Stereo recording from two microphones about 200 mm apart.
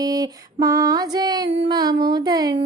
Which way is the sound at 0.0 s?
20° right (ahead or behind).